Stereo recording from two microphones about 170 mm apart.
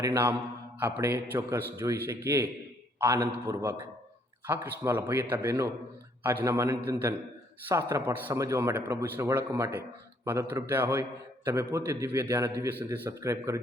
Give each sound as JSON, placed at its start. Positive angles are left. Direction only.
{"t": 0.0, "sound": "speech", "side_deg": -15}
{"t": 3.6, "sound": "speech", "side_deg": -15}